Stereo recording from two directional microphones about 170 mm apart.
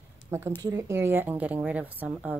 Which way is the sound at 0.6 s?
20° right (ahead or behind).